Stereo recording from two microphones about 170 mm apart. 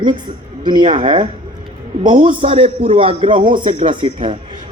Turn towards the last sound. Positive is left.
turn(degrees=-30)  # may be behind; listen again after turning